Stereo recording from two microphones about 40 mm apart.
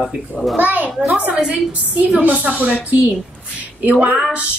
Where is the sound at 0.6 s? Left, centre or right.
Right.